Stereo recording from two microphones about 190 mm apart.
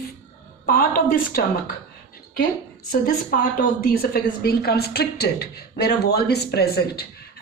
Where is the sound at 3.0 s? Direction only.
50° left (ahead or behind).